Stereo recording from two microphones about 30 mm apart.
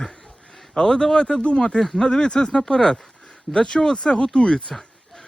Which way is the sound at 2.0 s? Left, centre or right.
Left.